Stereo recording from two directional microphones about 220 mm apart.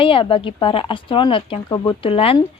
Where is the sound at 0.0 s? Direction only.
25° left (ahead or behind).